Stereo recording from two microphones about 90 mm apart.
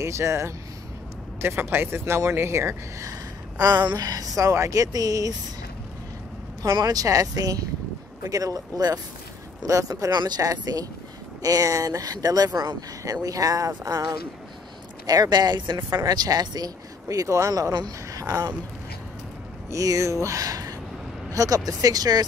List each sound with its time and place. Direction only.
0.0 s speech: 30° right (ahead or behind)
6.6 s speech: 45° right (ahead or behind)
19.7 s speech: 40° right (ahead or behind)